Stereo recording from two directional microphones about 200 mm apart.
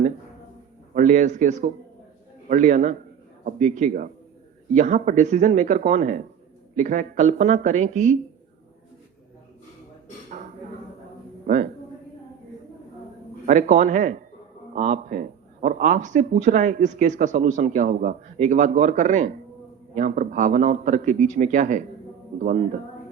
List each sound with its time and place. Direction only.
0.9 s speech: 35° right (ahead or behind)
13.4 s speech: 40° right (ahead or behind)